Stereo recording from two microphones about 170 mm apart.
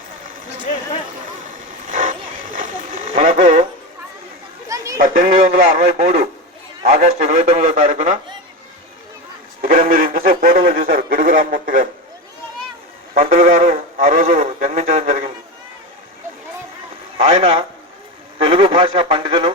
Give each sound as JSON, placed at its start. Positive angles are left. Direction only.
{"t": 1.9, "sound": "vehicle", "side_deg": -50}
{"t": 3.2, "sound": "a sound", "side_deg": -50}
{"t": 4.9, "sound": "speech", "side_deg": -55}
{"t": 5.5, "sound": "speech", "side_deg": -40}
{"t": 9.6, "sound": "speech", "side_deg": -55}
{"t": 13.1, "sound": "speech", "side_deg": -55}
{"t": 17.4, "sound": "speech", "side_deg": -35}